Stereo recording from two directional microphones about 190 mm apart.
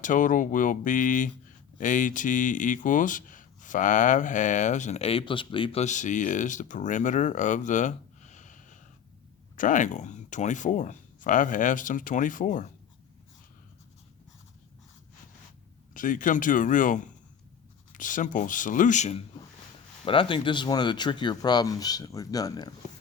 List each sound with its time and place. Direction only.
0.0 s speech: 45° left (ahead or behind)
16.0 s speech: 45° left (ahead or behind)
20.1 s speech: 25° left (ahead or behind)